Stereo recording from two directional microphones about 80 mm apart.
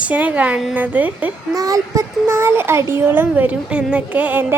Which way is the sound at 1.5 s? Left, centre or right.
Right.